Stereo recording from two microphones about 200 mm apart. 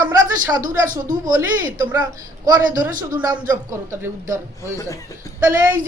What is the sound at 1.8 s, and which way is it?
Speech, 15° right (ahead or behind).